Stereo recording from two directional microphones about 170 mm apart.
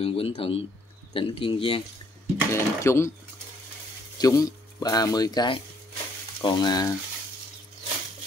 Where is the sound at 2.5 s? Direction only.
15° left (ahead or behind).